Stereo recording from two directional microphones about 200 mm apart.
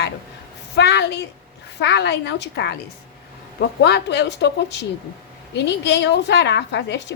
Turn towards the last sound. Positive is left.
turn(degrees=60)  # may be behind; listen again after turning